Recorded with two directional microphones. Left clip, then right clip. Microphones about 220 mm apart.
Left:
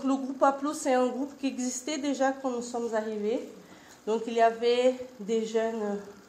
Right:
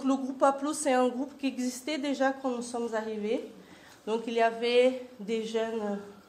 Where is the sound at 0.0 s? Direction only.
25° right (ahead or behind).